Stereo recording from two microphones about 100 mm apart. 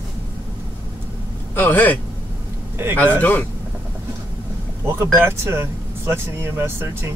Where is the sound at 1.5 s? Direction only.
20° left (ahead or behind).